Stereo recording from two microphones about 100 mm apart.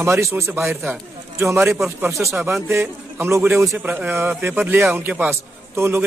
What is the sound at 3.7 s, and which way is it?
A man's voice, 15° right (ahead or behind).